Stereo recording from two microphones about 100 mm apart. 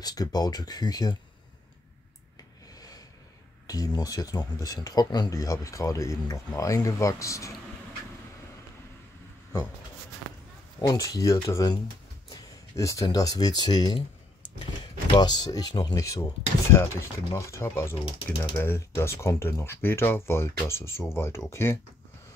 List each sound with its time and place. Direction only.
0.0 s speech: 40° left (ahead or behind)
2.7 s a sound: 40° left (ahead or behind)
3.6 s speech: 40° left (ahead or behind)
10.8 s speech: 35° left (ahead or behind)